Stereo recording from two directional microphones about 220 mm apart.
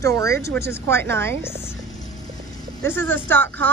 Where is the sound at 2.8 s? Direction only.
10° left (ahead or behind).